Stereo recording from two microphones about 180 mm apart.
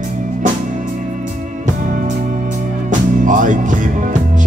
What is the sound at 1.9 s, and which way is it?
Music, 45° right (ahead or behind).